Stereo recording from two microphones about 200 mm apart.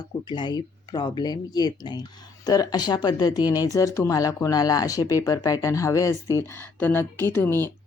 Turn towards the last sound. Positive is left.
turn(degrees=10)  # may be behind; listen again after turning